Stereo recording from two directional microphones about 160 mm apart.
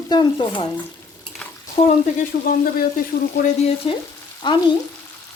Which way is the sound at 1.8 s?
60° left (ahead or behind).